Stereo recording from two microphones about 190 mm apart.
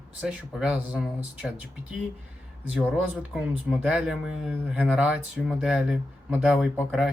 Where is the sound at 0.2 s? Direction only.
5° right (ahead or behind).